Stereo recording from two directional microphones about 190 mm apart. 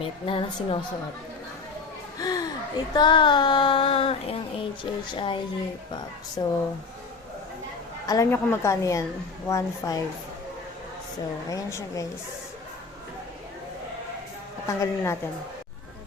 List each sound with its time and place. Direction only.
0.0 s speech: 30° left (ahead or behind)
2.1 s a sound: 20° left (ahead or behind)
2.9 s speech: 25° left (ahead or behind)
8.0 s a woman's voice: 20° left (ahead or behind)
11.4 s a woman's voice: 15° left (ahead or behind)
14.7 s a woman's voice: 15° left (ahead or behind)